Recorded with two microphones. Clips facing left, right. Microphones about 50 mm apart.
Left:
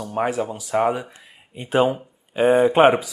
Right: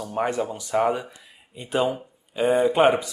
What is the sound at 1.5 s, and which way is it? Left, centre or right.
Speech, left.